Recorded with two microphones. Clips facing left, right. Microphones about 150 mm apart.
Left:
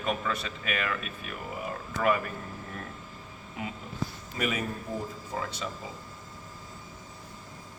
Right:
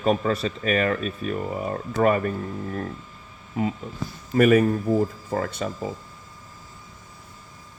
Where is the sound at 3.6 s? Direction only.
35° right (ahead or behind).